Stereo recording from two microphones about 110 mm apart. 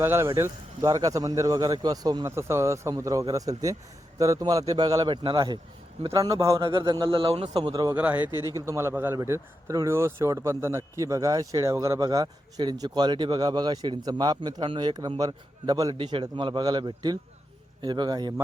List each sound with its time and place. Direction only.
0.0 s a man's voice: 25° right (ahead or behind); by 5.5 s 45° right (ahead or behind)
6.1 s speech: 30° right (ahead or behind)
6.6 s speech: 45° right (ahead or behind); by 7.5 s 60° right (ahead or behind)
7.5 s speech: 35° right (ahead or behind)
7.9 s speech: 15° right (ahead or behind)
8.5 s a man's voice: 25° right (ahead or behind)
16.0 s speech: 50° right (ahead or behind)